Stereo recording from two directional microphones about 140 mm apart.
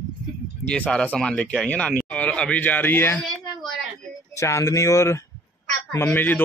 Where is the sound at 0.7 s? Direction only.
10° left (ahead or behind).